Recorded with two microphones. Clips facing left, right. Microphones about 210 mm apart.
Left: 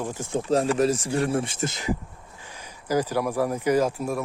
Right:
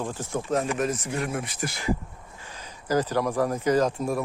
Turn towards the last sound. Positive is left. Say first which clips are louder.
# even
turn(degrees=5)  # may be behind; listen again after turning